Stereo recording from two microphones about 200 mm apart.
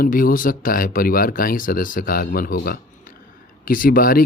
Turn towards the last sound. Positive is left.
turn(degrees=45)  # may be behind; listen again after turning